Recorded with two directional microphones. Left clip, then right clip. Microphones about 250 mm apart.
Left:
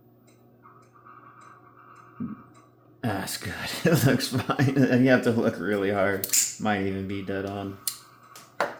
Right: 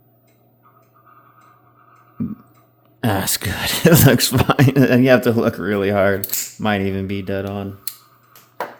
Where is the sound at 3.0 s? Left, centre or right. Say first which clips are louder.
Right 10 dB; right.